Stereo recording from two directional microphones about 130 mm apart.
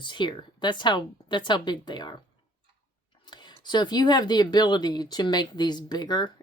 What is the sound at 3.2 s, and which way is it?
Speech, 35° left (ahead or behind).